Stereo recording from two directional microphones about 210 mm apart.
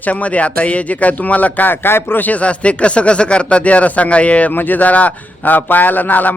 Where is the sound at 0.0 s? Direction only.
5° left (ahead or behind).